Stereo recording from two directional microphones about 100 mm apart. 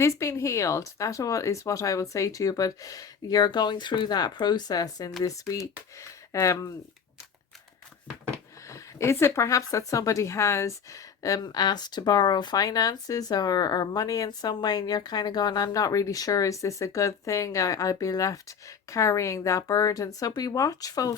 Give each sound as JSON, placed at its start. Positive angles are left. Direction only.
{"t": 0.0, "sound": "speech", "side_deg": 30}
{"t": 8.6, "sound": "speech", "side_deg": 30}